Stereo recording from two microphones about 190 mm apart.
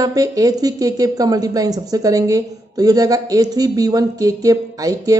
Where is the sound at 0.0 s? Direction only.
20° right (ahead or behind).